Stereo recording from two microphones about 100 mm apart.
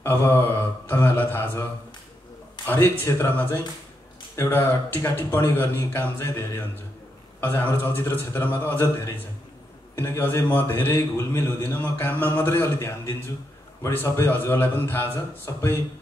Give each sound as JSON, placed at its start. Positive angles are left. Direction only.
{"t": 0.0, "sound": "a man's voice", "side_deg": 20}